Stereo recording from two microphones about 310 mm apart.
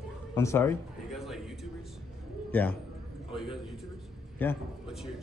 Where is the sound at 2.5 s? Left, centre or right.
Centre.